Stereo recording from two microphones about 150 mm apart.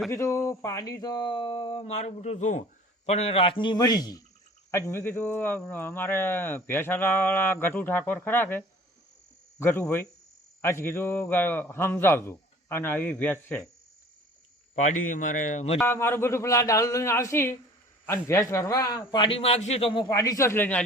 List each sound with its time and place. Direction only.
0.1 s speech: 20° left (ahead or behind)
14.8 s a man's voice: 55° left (ahead or behind)
15.9 s a man's voice: 15° left (ahead or behind); by 20.1 s 35° left (ahead or behind)
20.1 s speech: 20° left (ahead or behind)